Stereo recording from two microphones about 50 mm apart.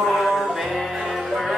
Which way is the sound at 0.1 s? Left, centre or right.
Centre.